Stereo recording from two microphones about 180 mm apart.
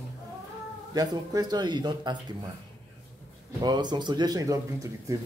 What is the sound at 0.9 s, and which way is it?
Speech, 20° right (ahead or behind).